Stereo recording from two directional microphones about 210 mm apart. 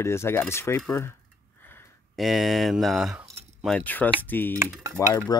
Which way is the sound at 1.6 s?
10° left (ahead or behind).